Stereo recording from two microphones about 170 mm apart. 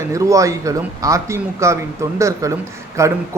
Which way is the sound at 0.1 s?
20° right (ahead or behind).